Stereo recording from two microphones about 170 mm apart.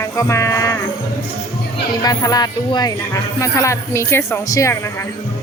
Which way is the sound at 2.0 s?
20° left (ahead or behind).